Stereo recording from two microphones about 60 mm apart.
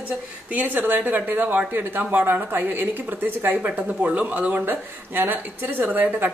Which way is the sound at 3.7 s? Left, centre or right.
Right.